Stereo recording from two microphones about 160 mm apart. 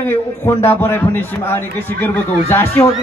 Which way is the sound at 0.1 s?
15° left (ahead or behind).